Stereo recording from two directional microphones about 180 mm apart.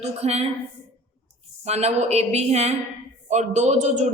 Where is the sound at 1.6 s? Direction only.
35° right (ahead or behind).